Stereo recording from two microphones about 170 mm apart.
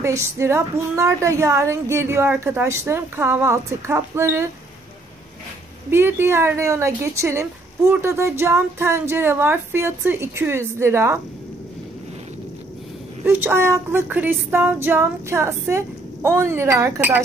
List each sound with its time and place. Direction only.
0.0 s a woman's voice: 15° right (ahead or behind)
5.9 s a woman's voice: 15° right (ahead or behind)
13.2 s a woman's voice: 10° right (ahead or behind)